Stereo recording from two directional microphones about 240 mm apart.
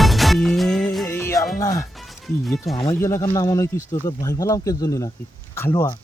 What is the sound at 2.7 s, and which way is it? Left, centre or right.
Speech, centre.